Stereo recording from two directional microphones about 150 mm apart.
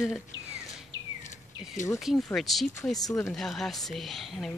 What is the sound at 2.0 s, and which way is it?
Speech, centre (ahead or behind).